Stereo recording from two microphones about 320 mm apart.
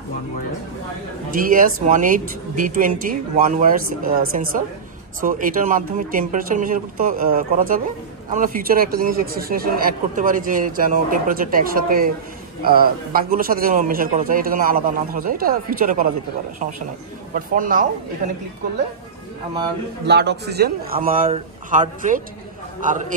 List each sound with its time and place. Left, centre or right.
1.3 s speech: right
17.3 s speech: right
20.1 s speech: right